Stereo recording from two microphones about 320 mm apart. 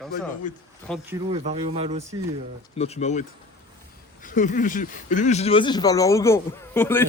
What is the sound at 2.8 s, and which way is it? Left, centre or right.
Speech, centre.